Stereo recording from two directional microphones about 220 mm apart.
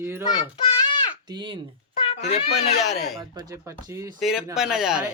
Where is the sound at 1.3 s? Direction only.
20° right (ahead or behind).